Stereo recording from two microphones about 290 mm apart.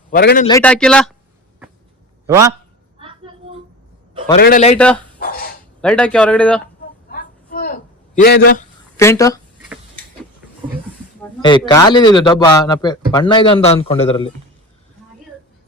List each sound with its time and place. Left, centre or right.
0.1 s a man's voice: left
0.4 s speech: centre
2.2 s a man's voice: centre
4.4 s a man's voice: left
4.8 s speech: centre
5.2 s dog: left
5.8 s speech: centre
7.1 s a sound: left
9.0 s a man's voice: centre
11.3 s a man's voice: centre